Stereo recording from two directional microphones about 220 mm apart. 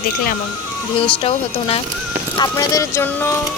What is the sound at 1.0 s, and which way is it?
Speech, 25° left (ahead or behind).